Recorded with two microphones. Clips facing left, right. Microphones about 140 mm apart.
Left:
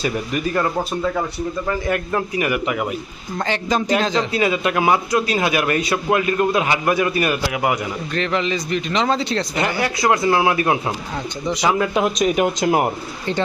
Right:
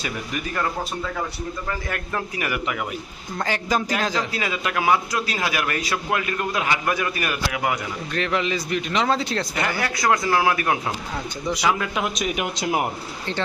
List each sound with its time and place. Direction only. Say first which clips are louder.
1.9 s a man's voice: left 7 dB; 20° left (ahead or behind)
3.4 s speech: left 3 dB; 5° right (ahead or behind)
4.1 s a man's voice: left 7 dB; 25° left (ahead or behind)
8.1 s speech: left 2 dB; 10° right (ahead or behind)
9.6 s a man's voice: left 5 dB; 25° left (ahead or behind); by 12.6 s 40° left (ahead or behind)
12.6 s speech: left 4 dB; 55° left (ahead or behind)